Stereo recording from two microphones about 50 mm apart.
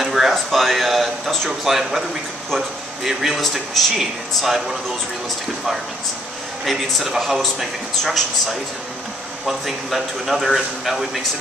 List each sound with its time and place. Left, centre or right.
0.0 s speech: centre
6.6 s speech: centre